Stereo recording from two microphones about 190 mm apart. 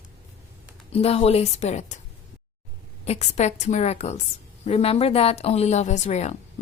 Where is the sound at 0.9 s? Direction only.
30° left (ahead or behind).